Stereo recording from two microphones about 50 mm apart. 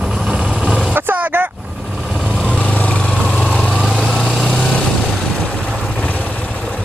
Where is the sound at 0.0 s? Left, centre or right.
Centre.